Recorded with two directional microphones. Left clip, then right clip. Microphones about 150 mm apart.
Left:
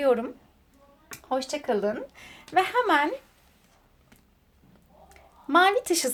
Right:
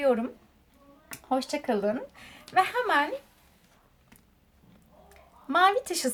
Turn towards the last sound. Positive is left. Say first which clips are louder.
# left 2 dB
turn(degrees=30)  # may be behind; listen again after turning